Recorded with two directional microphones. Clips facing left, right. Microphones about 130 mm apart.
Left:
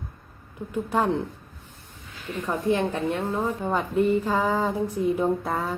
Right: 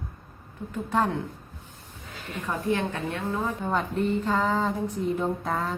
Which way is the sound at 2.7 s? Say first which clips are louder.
Left 4 dB; 15° left (ahead or behind).